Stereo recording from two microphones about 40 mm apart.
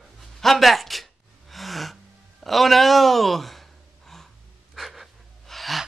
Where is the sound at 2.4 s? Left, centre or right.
Centre.